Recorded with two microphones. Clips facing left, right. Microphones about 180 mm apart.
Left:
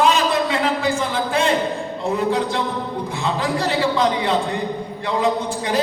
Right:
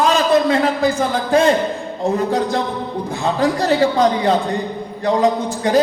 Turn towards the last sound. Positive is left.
turn(degrees=-40)  # may be behind; listen again after turning